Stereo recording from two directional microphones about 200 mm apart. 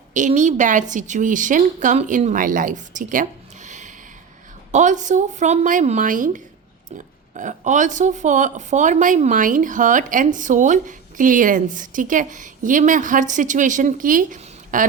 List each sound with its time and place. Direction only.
0.1 s speech: 40° right (ahead or behind)